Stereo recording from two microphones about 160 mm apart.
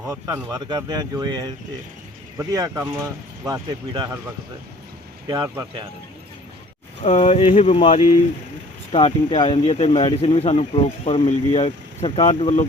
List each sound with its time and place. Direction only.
0.5 s speech: 25° right (ahead or behind)
5.3 s speech: 25° right (ahead or behind)
7.0 s speech: 45° left (ahead or behind)